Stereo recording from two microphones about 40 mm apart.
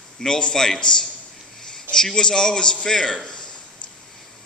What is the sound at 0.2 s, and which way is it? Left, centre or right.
A man's voice, centre.